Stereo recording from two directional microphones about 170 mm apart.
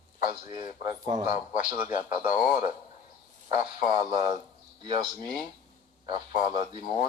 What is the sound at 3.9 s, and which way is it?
Speech, 25° right (ahead or behind).